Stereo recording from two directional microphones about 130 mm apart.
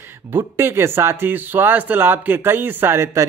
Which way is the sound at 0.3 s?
20° right (ahead or behind).